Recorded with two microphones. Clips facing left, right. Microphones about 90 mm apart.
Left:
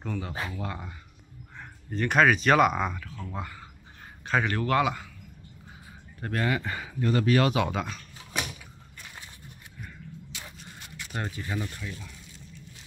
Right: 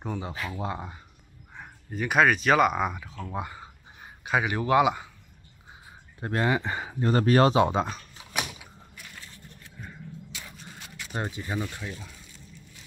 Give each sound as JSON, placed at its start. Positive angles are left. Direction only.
{"t": 0.0, "sound": "speech", "side_deg": -20}
{"t": 1.6, "sound": "a man's voice", "side_deg": -5}
{"t": 6.2, "sound": "speech", "side_deg": -25}
{"t": 8.4, "sound": "a sound", "side_deg": -15}
{"t": 11.1, "sound": "speech", "side_deg": -20}